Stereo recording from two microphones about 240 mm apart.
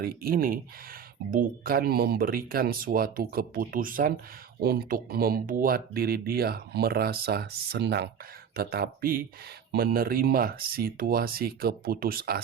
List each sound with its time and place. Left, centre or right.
0.0 s speech: right